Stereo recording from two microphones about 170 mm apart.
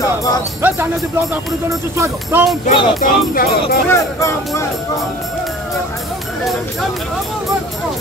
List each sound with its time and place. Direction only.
0.6 s speech: 15° right (ahead or behind)
2.6 s music: 35° left (ahead or behind)
3.0 s speech: 60° left (ahead or behind)
3.9 s speech: 15° left (ahead or behind)